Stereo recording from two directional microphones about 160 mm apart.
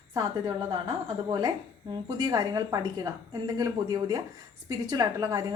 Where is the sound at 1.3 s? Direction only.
25° right (ahead or behind).